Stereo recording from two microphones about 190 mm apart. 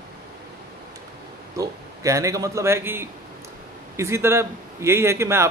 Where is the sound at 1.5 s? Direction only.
15° right (ahead or behind).